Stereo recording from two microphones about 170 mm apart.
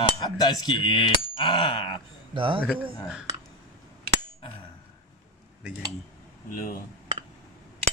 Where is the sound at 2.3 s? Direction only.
30° right (ahead or behind).